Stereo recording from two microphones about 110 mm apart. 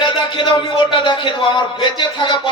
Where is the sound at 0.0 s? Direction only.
45° left (ahead or behind).